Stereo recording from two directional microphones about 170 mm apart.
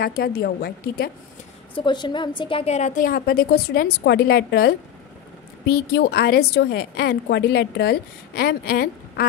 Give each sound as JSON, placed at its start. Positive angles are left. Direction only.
{"t": 0.0, "sound": "a woman's voice", "side_deg": 65}
{"t": 1.8, "sound": "a woman's voice", "side_deg": 25}
{"t": 3.1, "sound": "a woman's voice", "side_deg": 60}